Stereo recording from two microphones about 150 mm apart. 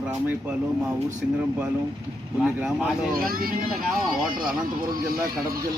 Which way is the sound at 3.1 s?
75° right (ahead or behind).